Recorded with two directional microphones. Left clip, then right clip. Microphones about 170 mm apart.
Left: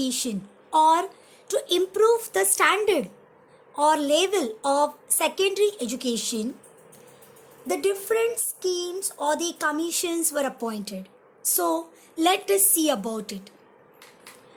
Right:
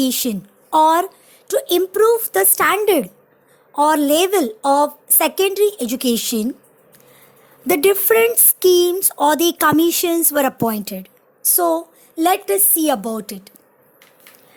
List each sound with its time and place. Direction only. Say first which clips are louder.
0.0 s speech: right 8 dB; 45° right (ahead or behind)
7.7 s speech: right 10 dB; 55° right (ahead or behind)
11.5 s speech: right 8 dB; 30° right (ahead or behind)